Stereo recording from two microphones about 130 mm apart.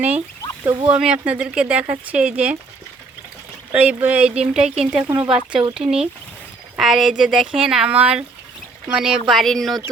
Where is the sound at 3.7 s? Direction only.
10° right (ahead or behind).